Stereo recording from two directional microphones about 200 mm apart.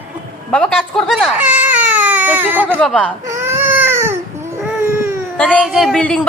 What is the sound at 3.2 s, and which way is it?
Baby cry, 10° right (ahead or behind).